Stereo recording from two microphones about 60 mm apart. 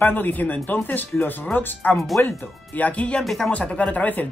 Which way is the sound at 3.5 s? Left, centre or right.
Left.